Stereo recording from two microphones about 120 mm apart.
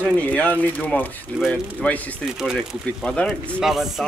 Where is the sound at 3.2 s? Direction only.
5° right (ahead or behind).